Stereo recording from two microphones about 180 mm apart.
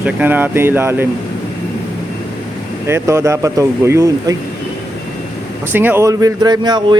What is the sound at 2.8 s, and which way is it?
Speech, 15° right (ahead or behind).